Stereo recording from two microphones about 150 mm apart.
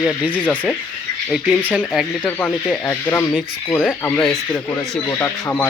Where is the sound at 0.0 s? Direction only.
Centre (ahead or behind).